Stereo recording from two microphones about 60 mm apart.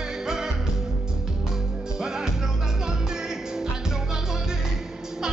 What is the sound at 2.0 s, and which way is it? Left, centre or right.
Music, centre.